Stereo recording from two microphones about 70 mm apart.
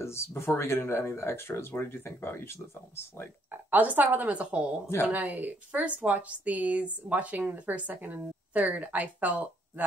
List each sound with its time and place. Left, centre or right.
0.0 s speech: left
3.7 s a woman's voice: right